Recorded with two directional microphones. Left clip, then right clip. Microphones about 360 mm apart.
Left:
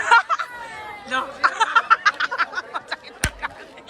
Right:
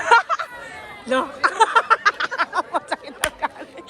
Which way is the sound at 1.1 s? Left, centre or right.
Centre.